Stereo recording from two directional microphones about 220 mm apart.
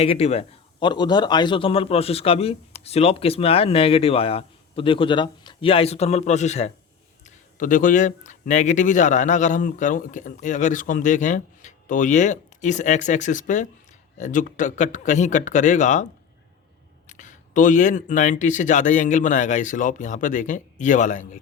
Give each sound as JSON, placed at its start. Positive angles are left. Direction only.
{"t": 0.0, "sound": "a man's voice", "side_deg": 30}
{"t": 17.1, "sound": "speech", "side_deg": 35}